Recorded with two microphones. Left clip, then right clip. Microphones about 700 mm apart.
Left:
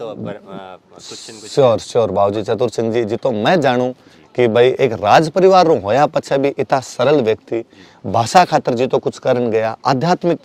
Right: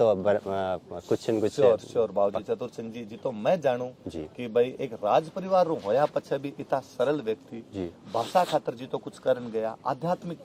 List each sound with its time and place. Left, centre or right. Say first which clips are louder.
0.0 s speech: right 5 dB; right
1.5 s speech: left 11 dB; left